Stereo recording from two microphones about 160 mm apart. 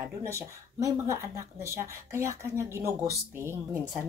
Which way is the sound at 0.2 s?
20° right (ahead or behind).